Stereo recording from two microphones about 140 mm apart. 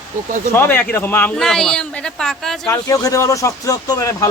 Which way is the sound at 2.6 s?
25° left (ahead or behind).